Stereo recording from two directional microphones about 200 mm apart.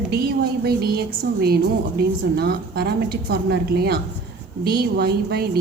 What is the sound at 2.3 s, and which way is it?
A woman's voice, 50° right (ahead or behind).